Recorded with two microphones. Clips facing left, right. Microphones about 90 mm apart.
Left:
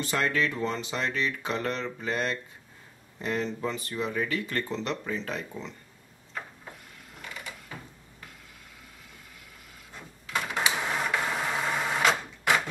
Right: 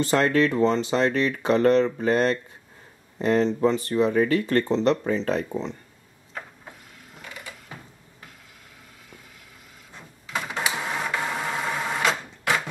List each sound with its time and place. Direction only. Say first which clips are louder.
0.0 s speech: right 7 dB; 35° right (ahead or behind)
9.9 s printer: right 1 dB; centre (ahead or behind)